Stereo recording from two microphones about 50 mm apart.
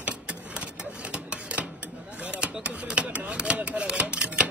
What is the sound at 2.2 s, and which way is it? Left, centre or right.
Chopping, right.